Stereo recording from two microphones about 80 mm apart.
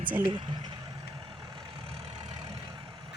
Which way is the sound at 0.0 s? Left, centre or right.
Right.